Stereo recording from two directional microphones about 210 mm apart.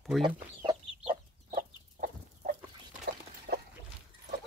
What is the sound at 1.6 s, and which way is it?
Chicken, 40° right (ahead or behind).